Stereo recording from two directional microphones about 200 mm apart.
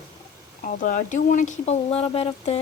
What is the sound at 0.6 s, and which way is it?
Speech, 40° left (ahead or behind).